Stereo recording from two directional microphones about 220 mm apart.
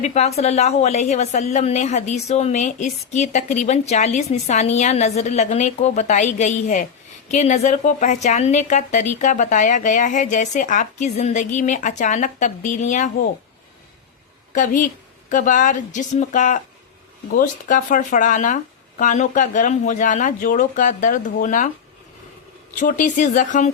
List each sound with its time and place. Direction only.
0.0 s a woman's voice: 30° left (ahead or behind)
14.5 s a woman's voice: 35° left (ahead or behind)
22.8 s a woman's voice: 35° left (ahead or behind)